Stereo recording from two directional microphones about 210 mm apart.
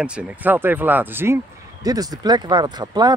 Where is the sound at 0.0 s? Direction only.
5° right (ahead or behind).